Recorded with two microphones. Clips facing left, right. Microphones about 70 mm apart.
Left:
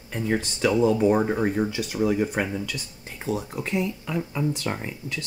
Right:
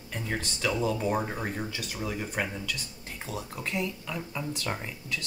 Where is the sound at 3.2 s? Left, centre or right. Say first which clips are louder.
Left 11 dB; left.